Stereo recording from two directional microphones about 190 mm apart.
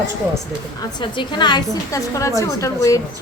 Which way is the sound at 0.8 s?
25° left (ahead or behind).